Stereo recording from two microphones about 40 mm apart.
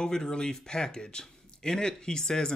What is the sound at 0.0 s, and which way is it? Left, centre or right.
Speech, centre.